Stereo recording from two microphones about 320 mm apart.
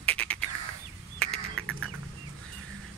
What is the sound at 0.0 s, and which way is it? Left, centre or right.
Bird, centre.